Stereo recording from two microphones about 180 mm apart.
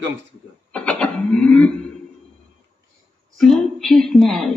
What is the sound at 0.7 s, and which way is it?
A woman's voice, 5° left (ahead or behind).